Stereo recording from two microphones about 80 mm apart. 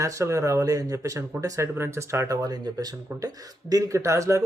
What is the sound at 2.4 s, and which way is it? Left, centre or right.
Speech, right.